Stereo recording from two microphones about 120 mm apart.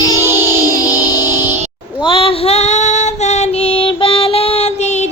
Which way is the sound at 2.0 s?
45° left (ahead or behind).